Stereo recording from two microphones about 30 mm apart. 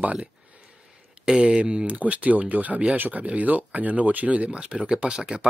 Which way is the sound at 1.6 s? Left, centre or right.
Right.